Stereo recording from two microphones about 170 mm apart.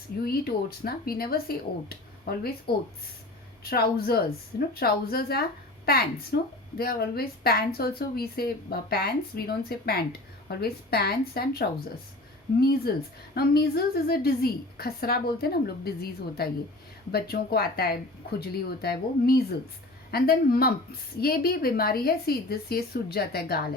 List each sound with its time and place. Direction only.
0.3 s speech: 65° left (ahead or behind)
3.6 s speech: 65° left (ahead or behind)